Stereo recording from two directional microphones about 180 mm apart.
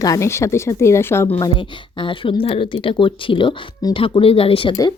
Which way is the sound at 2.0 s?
30° left (ahead or behind).